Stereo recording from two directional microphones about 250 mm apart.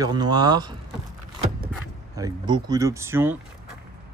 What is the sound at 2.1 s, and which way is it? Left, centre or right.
Speech, centre.